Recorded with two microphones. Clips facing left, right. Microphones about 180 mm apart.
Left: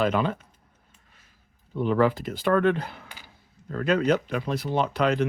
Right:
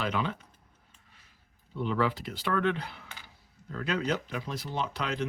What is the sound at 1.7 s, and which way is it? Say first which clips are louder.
Speech: left 7 dB; 50° left (ahead or behind).